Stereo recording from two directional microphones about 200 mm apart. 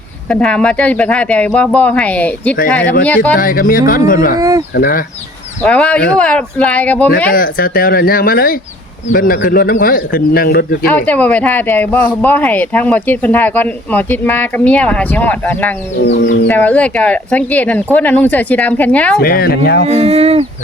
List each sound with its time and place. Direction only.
0.3 s speech: 5° left (ahead or behind)
3.3 s speech: 45° left (ahead or behind)
4.4 s a sound: 20° right (ahead or behind)
4.7 s speech: 45° left (ahead or behind)
5.6 s speech: 5° left (ahead or behind)
7.3 s speech: 45° left (ahead or behind)
10.9 s speech: 5° left (ahead or behind)
16.0 s chicken: 60° left (ahead or behind)
16.5 s speech: 10° left (ahead or behind)
19.2 s speech: 50° left (ahead or behind)
19.9 s speech: 30° right (ahead or behind)